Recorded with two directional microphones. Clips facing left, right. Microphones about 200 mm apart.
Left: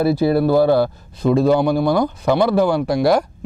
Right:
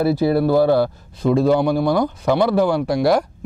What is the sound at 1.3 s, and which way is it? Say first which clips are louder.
Speech: left 1 dB; 10° left (ahead or behind).